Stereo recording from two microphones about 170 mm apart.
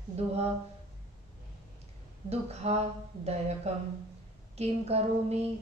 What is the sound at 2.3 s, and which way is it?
A woman's voice, 40° right (ahead or behind).